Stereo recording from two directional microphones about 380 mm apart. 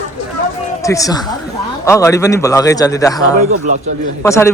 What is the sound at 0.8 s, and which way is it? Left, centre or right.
A man's voice, centre.